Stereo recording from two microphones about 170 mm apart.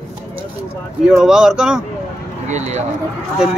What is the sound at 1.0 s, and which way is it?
Speech, 5° right (ahead or behind).